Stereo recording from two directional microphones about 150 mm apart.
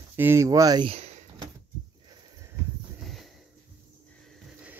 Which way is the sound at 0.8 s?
45° right (ahead or behind).